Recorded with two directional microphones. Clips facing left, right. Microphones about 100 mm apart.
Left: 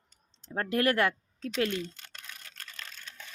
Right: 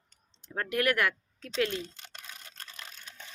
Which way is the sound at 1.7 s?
25° right (ahead or behind).